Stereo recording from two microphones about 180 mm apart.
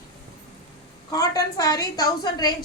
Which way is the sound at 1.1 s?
20° left (ahead or behind).